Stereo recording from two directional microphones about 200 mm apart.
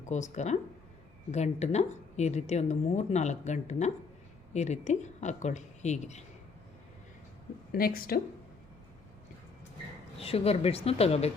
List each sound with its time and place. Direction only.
0.0 s speech: 35° left (ahead or behind)
7.7 s speech: 50° left (ahead or behind)
10.2 s speech: 30° left (ahead or behind)